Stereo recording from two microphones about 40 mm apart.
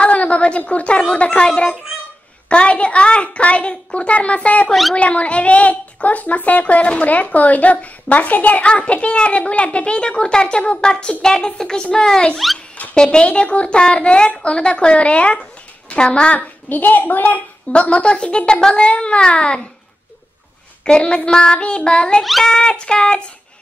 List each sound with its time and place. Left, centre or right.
0.0 s a woman's voice: left
16.3 s a child's voice: left
17.7 s a woman's voice: left
20.8 s a woman's voice: left